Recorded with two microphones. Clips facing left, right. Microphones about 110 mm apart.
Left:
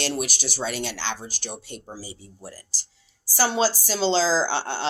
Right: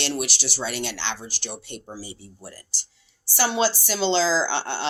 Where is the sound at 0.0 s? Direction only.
40° left (ahead or behind).